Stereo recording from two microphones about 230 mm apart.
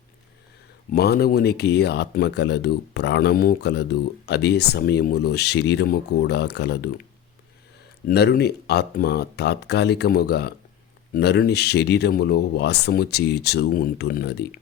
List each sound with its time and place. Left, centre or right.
0.9 s speech: left
8.0 s speech: left